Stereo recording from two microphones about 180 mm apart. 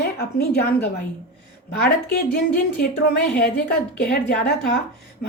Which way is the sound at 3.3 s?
65° left (ahead or behind).